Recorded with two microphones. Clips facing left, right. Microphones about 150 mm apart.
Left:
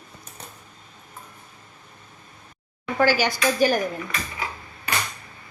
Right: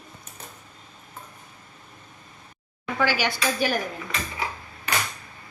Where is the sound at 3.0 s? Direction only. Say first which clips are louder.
Left 4 dB; 40° left (ahead or behind).